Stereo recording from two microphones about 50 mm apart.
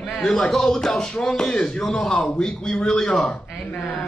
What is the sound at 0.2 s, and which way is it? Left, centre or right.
A man's voice, centre.